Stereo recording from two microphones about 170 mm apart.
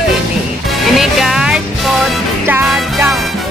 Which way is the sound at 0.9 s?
Centre (ahead or behind).